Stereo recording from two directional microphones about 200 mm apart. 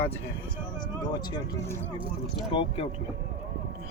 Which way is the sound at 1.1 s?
20° left (ahead or behind).